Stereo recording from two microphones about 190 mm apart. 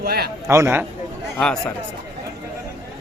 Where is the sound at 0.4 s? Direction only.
15° right (ahead or behind).